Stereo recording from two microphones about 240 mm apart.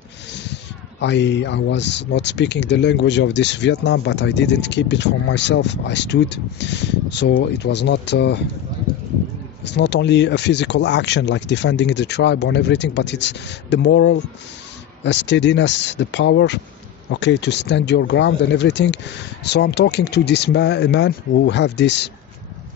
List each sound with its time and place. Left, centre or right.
0.3 s speech: left
9.7 s speech: left